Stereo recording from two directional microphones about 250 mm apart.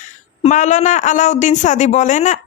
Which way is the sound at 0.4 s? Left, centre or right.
Left.